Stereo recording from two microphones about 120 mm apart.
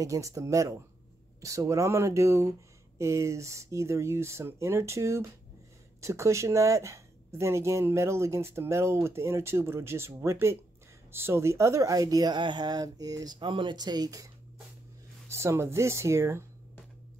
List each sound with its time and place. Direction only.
0.0 s speech: 25° right (ahead or behind)